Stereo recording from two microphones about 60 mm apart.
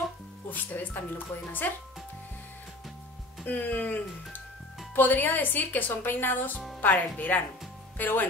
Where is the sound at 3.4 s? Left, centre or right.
Left.